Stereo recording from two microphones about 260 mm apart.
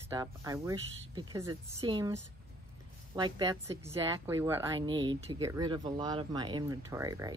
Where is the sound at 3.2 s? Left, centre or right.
Centre.